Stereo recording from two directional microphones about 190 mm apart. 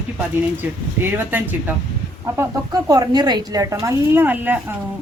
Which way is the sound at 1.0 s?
10° right (ahead or behind).